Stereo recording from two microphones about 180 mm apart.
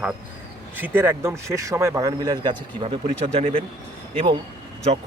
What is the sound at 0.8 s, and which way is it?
Speech, 10° right (ahead or behind).